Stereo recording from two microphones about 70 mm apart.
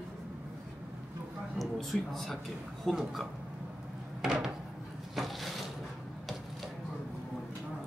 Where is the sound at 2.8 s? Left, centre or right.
Centre.